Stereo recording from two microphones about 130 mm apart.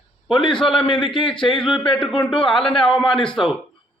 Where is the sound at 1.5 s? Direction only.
5° left (ahead or behind).